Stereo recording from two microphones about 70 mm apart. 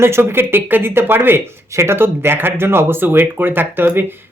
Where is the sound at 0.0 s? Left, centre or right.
Right.